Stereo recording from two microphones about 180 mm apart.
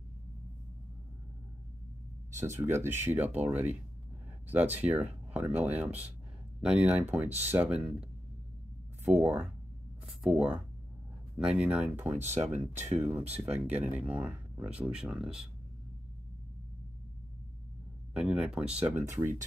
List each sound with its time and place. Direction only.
2.5 s speech: 15° right (ahead or behind)
9.0 s speech: 10° right (ahead or behind)
12.3 s speech: 40° right (ahead or behind)
13.4 s speech: 10° right (ahead or behind)
18.1 s speech: 5° right (ahead or behind)